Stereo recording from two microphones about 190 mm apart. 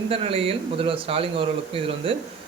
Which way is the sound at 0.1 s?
30° right (ahead or behind).